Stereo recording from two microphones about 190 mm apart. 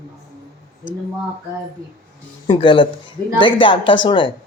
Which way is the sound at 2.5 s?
25° left (ahead or behind).